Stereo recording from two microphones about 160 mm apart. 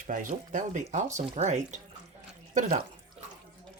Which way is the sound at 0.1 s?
55° right (ahead or behind).